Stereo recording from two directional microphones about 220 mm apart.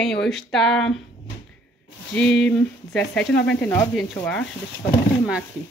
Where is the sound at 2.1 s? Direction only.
5° left (ahead or behind).